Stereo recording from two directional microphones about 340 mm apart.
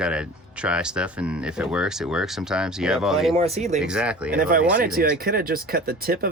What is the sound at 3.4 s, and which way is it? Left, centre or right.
Speech, centre.